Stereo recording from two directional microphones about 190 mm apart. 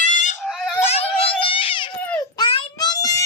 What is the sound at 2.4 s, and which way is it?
Child singing, 25° left (ahead or behind).